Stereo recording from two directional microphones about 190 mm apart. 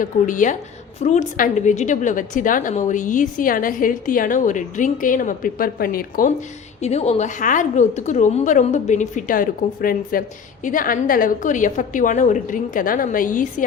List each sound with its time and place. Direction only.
0.0 s a woman's voice: 40° left (ahead or behind)
6.8 s a woman's voice: 35° left (ahead or behind)